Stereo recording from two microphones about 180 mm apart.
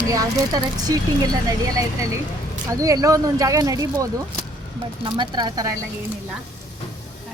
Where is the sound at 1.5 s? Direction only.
20° right (ahead or behind).